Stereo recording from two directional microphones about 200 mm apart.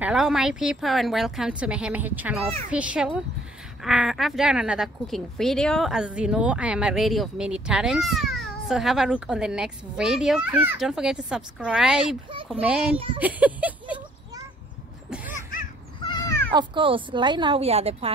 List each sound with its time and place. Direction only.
0.0 s speech: 5° right (ahead or behind)
12.9 s a woman's voice: 25° right (ahead or behind)
13.2 s a sound: 5° right (ahead or behind)
15.0 s a sound: 5° right (ahead or behind)
16.0 s cat: 20° left (ahead or behind)
16.5 s a woman's voice: 25° right (ahead or behind)